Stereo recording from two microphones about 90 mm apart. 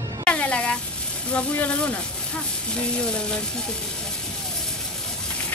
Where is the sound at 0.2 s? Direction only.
15° left (ahead or behind).